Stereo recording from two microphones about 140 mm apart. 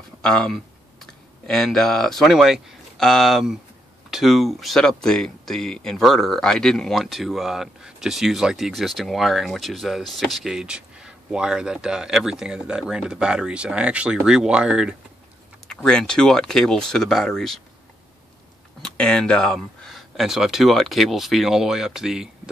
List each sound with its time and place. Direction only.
0.2 s speech: 5° left (ahead or behind)
15.7 s speech: 5° left (ahead or behind)
18.8 s speech: 5° left (ahead or behind)